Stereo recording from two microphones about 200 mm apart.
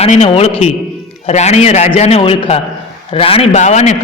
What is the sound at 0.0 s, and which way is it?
A man's voice, 30° left (ahead or behind).